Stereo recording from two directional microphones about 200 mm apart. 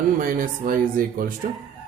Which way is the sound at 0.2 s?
45° right (ahead or behind).